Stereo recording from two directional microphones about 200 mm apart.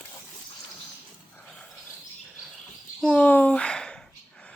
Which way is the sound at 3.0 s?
5° left (ahead or behind).